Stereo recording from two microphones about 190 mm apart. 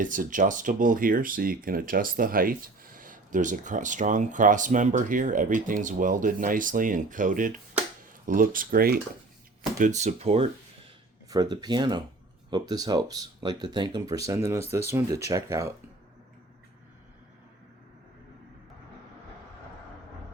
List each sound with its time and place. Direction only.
0.0 s speech: 45° right (ahead or behind)
9.7 s speech: 40° right (ahead or behind)
11.3 s speech: 20° right (ahead or behind)